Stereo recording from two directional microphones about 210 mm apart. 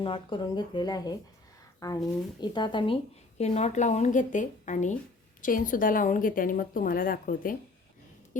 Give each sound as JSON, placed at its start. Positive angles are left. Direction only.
{"t": 0.0, "sound": "a woman's voice", "side_deg": 25}